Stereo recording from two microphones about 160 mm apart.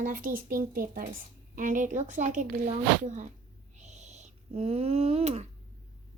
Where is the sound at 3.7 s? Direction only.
45° right (ahead or behind).